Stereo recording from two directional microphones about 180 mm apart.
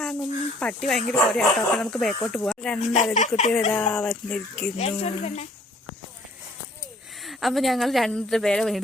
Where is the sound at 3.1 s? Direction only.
45° left (ahead or behind).